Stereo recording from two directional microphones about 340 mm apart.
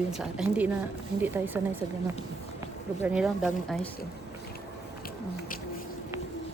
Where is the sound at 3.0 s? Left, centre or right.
Centre.